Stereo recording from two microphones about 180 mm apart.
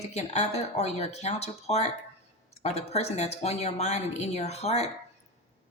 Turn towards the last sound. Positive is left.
turn(degrees=35)  # may be behind; listen again after turning